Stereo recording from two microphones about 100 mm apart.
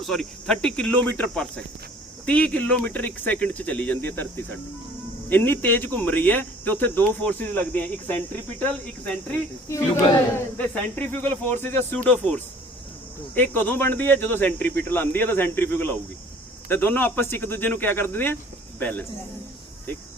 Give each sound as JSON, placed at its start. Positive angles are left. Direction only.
{"t": 0.0, "sound": "speech", "side_deg": 5}
{"t": 9.7, "sound": "speech", "side_deg": 30}
{"t": 10.9, "sound": "speech", "side_deg": 20}